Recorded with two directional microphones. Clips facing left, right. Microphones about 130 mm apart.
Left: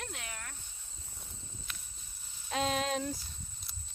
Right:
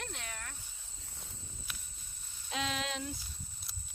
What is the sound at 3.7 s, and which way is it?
Horse, centre (ahead or behind).